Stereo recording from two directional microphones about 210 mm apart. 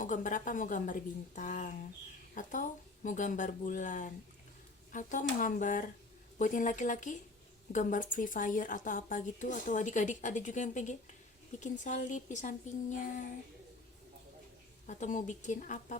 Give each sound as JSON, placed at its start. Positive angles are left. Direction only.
{"t": 0.0, "sound": "a woman's voice", "side_deg": 40}
{"t": 14.8, "sound": "a woman's voice", "side_deg": 35}